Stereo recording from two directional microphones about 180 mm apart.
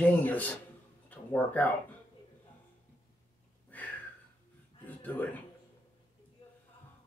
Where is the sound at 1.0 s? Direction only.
10° left (ahead or behind).